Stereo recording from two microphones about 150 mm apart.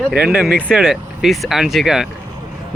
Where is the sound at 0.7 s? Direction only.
Centre (ahead or behind).